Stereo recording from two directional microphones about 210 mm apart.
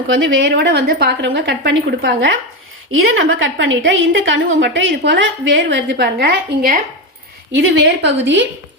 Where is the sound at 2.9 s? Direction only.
70° right (ahead or behind).